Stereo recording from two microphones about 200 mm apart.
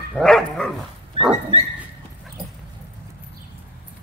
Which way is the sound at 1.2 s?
25° right (ahead or behind).